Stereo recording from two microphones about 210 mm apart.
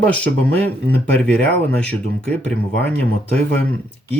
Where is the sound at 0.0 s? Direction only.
5° left (ahead or behind).